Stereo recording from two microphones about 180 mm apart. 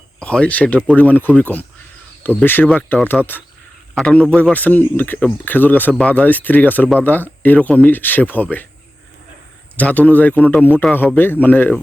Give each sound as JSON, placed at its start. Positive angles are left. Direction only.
{"t": 0.2, "sound": "a man's voice", "side_deg": 5}
{"t": 9.7, "sound": "a man's voice", "side_deg": 10}